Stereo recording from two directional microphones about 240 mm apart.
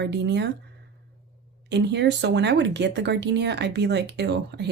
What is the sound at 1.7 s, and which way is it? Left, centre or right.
Speech, right.